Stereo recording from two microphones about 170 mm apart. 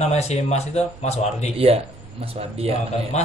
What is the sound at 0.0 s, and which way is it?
Speech, 40° left (ahead or behind).